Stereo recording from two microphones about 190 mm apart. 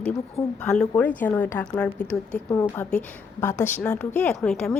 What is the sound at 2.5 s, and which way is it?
A woman's voice, 15° left (ahead or behind).